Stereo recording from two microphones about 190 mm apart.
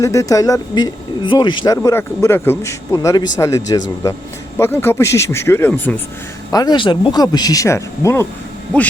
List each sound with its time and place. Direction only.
0.0 s speech: 15° left (ahead or behind)
6.5 s speech: 20° left (ahead or behind)